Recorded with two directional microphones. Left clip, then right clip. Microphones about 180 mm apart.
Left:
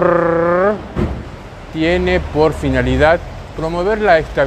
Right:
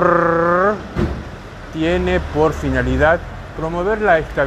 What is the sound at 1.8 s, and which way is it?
Speech, 15° left (ahead or behind).